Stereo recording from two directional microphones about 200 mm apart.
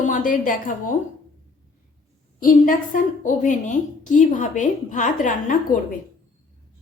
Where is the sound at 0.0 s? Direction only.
40° left (ahead or behind).